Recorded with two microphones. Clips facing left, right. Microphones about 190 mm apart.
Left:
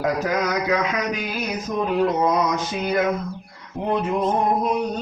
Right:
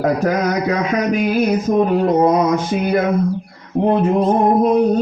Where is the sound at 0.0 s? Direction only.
55° right (ahead or behind).